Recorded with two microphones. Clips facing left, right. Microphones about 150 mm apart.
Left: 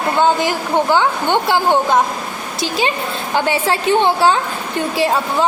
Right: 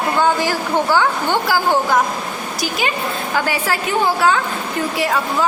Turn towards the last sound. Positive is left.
turn(degrees=30)  # may be behind; listen again after turning